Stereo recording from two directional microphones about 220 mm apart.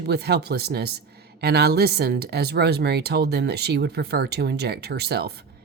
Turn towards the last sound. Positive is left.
turn(degrees=-45)  # may be behind; listen again after turning